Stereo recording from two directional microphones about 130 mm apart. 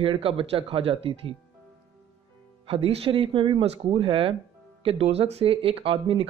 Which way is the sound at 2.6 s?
45° right (ahead or behind).